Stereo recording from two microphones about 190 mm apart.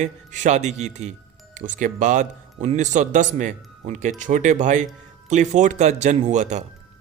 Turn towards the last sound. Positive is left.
turn(degrees=-40)  # may be behind; listen again after turning